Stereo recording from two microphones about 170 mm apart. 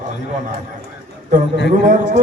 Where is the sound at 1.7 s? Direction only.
45° right (ahead or behind).